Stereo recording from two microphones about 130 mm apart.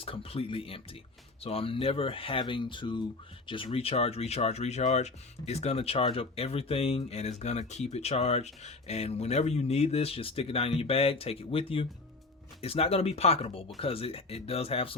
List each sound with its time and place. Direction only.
0.0 s speech: 45° left (ahead or behind)